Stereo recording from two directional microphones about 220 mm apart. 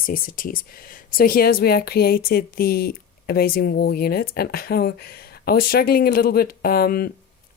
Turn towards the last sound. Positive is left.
turn(degrees=45)  # may be behind; listen again after turning